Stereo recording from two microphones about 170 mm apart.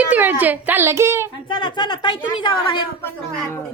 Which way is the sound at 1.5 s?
25° left (ahead or behind).